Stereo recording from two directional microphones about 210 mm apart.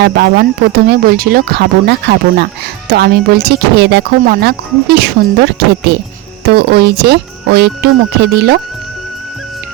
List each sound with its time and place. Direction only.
0.0 s speech: 50° right (ahead or behind)